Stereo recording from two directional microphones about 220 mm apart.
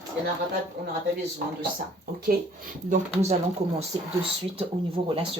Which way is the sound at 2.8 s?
30° right (ahead or behind).